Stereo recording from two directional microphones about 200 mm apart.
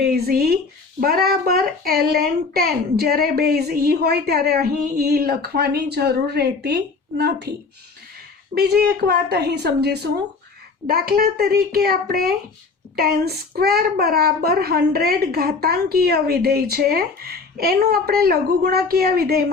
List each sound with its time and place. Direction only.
0.0 s a child's voice: 50° right (ahead or behind)
8.5 s a child's voice: 50° right (ahead or behind)